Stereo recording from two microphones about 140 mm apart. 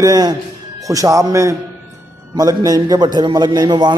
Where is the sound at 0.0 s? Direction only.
30° right (ahead or behind).